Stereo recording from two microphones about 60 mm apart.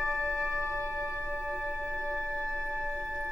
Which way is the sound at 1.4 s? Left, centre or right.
Right.